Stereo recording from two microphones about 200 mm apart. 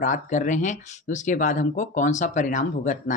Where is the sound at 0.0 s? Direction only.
40° left (ahead or behind).